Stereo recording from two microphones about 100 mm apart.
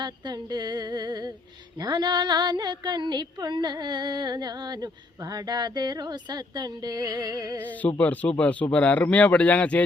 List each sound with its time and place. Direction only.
0.0 s female singing: 45° right (ahead or behind)
7.7 s speech: 15° left (ahead or behind)